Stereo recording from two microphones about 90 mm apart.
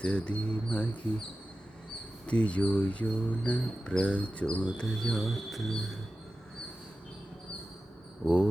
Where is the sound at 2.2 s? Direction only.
15° left (ahead or behind).